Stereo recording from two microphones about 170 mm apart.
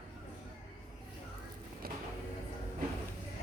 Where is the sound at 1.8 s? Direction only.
65° right (ahead or behind).